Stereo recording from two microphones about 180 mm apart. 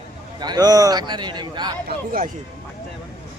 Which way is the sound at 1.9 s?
50° right (ahead or behind).